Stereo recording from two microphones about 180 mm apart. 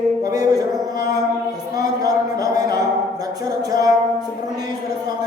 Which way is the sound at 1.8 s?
20° right (ahead or behind).